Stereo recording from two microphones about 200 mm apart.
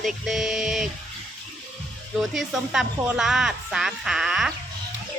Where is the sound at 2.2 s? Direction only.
Centre (ahead or behind).